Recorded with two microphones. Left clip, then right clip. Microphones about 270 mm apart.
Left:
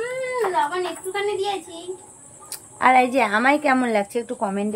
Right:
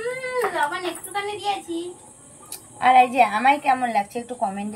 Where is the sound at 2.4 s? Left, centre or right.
Centre.